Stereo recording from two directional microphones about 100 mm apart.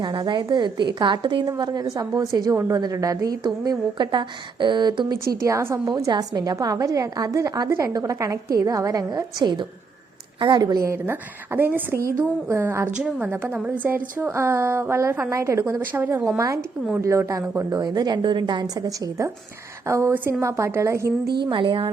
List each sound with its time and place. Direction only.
0.0 s a woman's voice: 50° right (ahead or behind)
5.2 s a woman's voice: 30° right (ahead or behind); by 10.8 s 45° right (ahead or behind)
10.8 s a woman's voice: 25° right (ahead or behind)
17.4 s a woman's voice: 20° right (ahead or behind)
17.7 s a woman's voice: 40° right (ahead or behind)
21.4 s speech: 55° right (ahead or behind)